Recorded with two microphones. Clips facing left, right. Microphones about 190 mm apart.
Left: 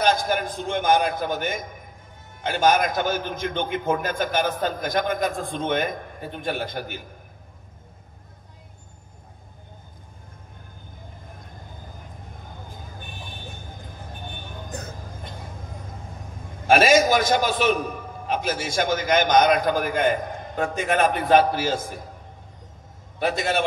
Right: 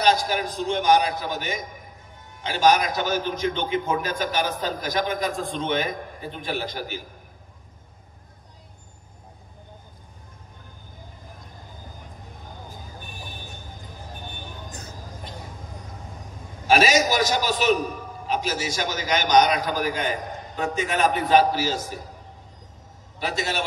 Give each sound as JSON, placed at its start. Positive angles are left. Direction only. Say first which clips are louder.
{"t": 0.0, "sound": "a man's voice", "louder": "even", "side_deg": 50}
{"t": 14.7, "sound": "music", "louder": "left 4 dB", "side_deg": 60}
{"t": 16.6, "sound": "a man's voice", "louder": "left 3 dB", "side_deg": 55}
{"t": 23.1, "sound": "a man's voice", "louder": "left 4 dB", "side_deg": 55}